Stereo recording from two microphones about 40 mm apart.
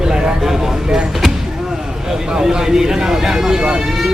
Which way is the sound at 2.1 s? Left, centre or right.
Centre.